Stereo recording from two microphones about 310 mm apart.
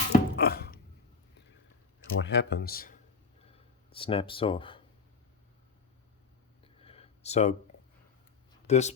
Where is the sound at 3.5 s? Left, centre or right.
Centre.